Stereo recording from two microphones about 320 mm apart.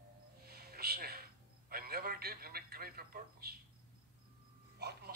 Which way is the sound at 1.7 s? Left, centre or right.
Right.